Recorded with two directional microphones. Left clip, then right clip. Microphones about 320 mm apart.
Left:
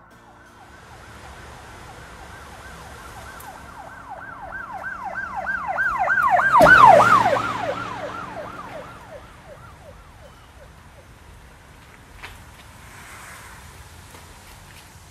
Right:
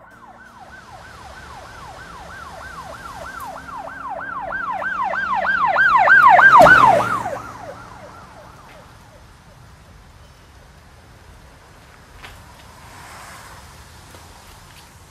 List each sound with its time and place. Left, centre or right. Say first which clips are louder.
4.5 s emergency vehicle: right 7 dB; centre